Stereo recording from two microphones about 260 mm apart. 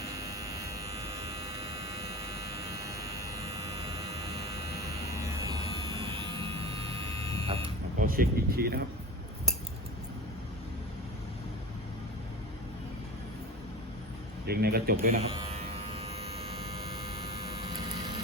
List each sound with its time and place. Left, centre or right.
0.1 s electric shaver: centre
1.4 s electric shaver: left
2.8 s electric shaver: centre
4.9 s electric shaver: centre
6.0 s vehicle: centre
8.0 s speech: right
14.4 s speech: right
15.3 s electric shaver: right